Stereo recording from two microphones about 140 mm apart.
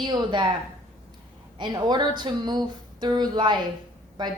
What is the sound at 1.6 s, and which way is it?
A woman's voice, 30° right (ahead or behind).